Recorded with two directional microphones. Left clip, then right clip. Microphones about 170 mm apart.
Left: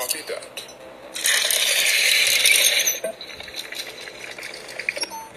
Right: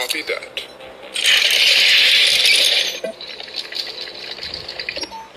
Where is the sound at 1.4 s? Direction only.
30° right (ahead or behind).